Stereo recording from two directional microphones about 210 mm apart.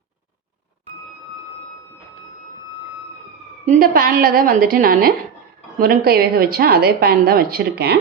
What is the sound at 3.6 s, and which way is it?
A woman's voice, 40° right (ahead or behind).